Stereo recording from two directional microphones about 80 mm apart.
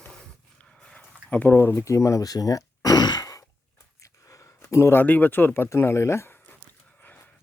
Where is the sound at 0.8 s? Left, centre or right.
Centre; by 4.4 s left.